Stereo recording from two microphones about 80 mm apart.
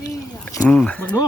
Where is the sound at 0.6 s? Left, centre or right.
Centre.